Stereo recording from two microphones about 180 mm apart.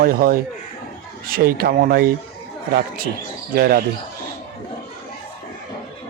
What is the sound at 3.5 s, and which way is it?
Speech, 55° right (ahead or behind).